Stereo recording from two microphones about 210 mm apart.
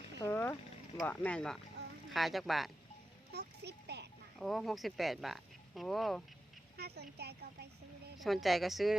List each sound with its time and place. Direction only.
0.2 s speech: 10° left (ahead or behind)
1.8 s a sound: 55° right (ahead or behind)
2.1 s speech: centre (ahead or behind)
3.3 s a child's voice: 50° right (ahead or behind)
4.4 s speech: centre (ahead or behind)
6.7 s speech: 50° right (ahead or behind)
8.2 s speech: centre (ahead or behind)